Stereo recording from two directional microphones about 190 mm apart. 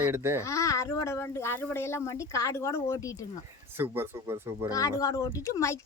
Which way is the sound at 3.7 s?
10° right (ahead or behind).